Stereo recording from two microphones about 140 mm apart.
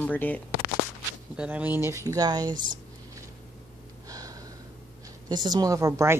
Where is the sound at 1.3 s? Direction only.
10° right (ahead or behind); by 2.5 s 30° right (ahead or behind).